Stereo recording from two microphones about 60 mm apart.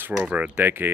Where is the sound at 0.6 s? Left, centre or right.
Right.